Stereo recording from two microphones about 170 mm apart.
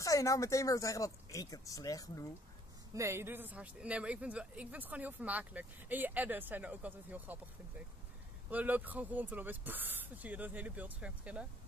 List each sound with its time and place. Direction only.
0.0 s speech: 20° left (ahead or behind)
2.9 s speech: 15° right (ahead or behind)